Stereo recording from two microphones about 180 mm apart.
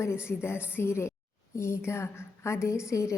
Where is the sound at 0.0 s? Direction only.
15° left (ahead or behind).